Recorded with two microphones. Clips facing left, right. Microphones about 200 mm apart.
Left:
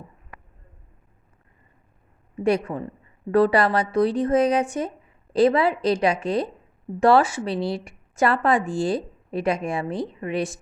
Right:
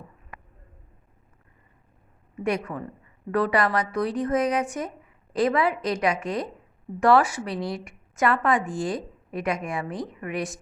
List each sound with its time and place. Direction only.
2.4 s a woman's voice: 30° left (ahead or behind)